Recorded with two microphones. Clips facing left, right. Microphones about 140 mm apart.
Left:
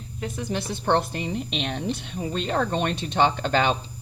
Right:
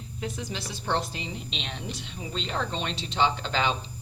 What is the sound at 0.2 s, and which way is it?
A woman's voice, 55° left (ahead or behind).